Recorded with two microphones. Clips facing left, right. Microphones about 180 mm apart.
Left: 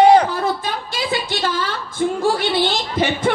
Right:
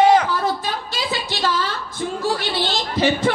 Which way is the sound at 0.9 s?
55° left (ahead or behind).